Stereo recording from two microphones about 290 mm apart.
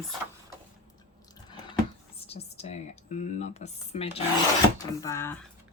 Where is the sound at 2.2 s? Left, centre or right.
Left.